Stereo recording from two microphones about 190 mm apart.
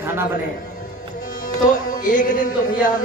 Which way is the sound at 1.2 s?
45° left (ahead or behind).